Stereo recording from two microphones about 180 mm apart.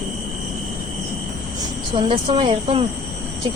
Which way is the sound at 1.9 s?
25° right (ahead or behind).